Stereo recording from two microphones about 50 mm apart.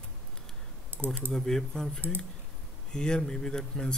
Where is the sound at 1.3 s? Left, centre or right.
Centre.